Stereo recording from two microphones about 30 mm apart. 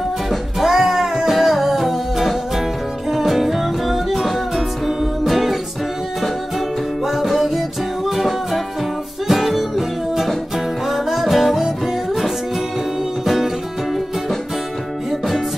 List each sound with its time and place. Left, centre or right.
0.6 s music: centre
7.1 s music: centre